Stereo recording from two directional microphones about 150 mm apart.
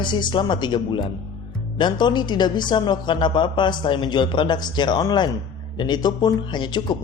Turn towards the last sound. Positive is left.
turn(degrees=30)  # may be behind; listen again after turning